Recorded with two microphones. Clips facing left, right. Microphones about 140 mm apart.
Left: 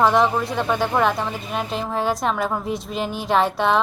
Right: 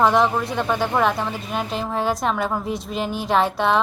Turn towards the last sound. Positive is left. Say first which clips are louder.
# even
turn(degrees=0)  # may be behind; listen again after turning